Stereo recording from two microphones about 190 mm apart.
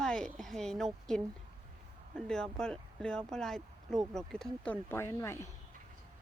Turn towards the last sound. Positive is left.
turn(degrees=15)  # may be behind; listen again after turning